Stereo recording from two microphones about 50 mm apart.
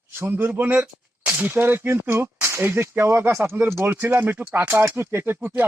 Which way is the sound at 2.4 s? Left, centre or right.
Right.